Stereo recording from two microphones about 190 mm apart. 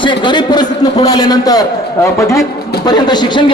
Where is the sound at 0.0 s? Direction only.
25° left (ahead or behind).